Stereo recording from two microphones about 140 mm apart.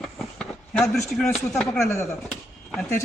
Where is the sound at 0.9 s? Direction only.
5° left (ahead or behind).